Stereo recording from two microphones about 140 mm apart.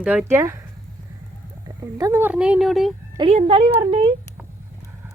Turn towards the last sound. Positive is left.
turn(degrees=-40)  # may be behind; listen again after turning